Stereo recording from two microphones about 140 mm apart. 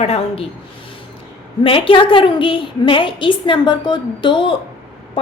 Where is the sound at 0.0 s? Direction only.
50° left (ahead or behind).